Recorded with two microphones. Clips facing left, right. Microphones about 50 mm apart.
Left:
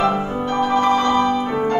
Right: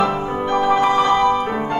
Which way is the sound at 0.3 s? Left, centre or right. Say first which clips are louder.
Right 2 dB; centre.